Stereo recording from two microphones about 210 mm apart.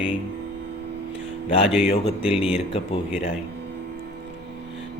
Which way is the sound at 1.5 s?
30° left (ahead or behind).